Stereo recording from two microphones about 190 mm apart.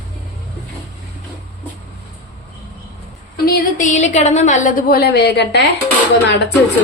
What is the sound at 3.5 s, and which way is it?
A woman's voice, 40° left (ahead or behind).